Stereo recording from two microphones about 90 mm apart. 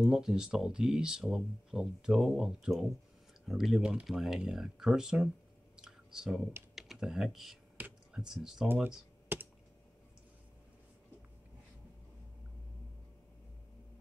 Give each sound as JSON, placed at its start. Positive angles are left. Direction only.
{"t": 0.0, "sound": "speech", "side_deg": -5}
{"t": 5.8, "sound": "a sound", "side_deg": -5}
{"t": 6.7, "sound": "speech", "side_deg": 0}
{"t": 9.3, "sound": "computer keyboard", "side_deg": -20}